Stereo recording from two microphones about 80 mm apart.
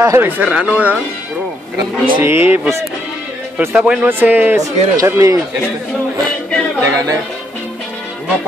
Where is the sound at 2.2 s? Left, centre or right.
Right.